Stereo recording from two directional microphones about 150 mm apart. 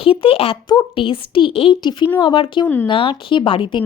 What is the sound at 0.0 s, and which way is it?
A woman's voice, 40° left (ahead or behind).